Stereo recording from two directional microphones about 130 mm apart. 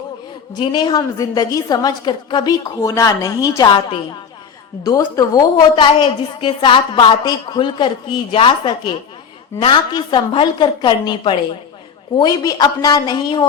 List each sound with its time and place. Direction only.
0.6 s a woman's voice: 35° left (ahead or behind)
4.9 s a woman's voice: 25° left (ahead or behind)
12.2 s a woman's voice: 25° left (ahead or behind)